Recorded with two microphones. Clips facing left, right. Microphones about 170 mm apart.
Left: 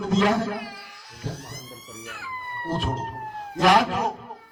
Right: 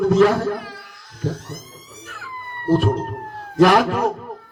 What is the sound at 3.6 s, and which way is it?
Speech, 50° right (ahead or behind).